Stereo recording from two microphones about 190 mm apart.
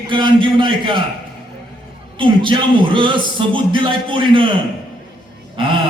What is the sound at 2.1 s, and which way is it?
A man's voice, 25° right (ahead or behind).